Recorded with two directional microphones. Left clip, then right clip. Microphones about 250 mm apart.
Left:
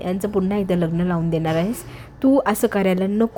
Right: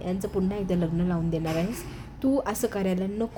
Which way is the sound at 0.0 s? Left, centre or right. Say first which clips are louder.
Left 7 dB; left.